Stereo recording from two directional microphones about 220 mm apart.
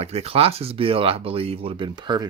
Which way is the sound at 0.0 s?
30° right (ahead or behind).